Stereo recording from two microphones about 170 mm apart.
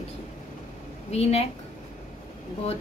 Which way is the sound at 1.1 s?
40° left (ahead or behind).